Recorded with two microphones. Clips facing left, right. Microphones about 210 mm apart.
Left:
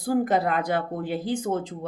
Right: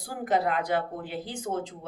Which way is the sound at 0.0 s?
40° left (ahead or behind).